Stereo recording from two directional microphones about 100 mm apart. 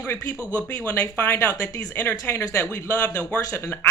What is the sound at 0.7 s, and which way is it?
Speech, 15° left (ahead or behind).